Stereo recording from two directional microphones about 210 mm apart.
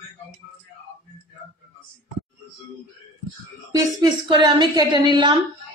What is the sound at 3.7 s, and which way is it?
A woman's voice, 20° right (ahead or behind).